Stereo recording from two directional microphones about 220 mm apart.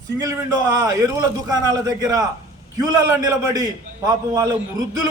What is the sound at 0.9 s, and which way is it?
A man's voice, 15° right (ahead or behind).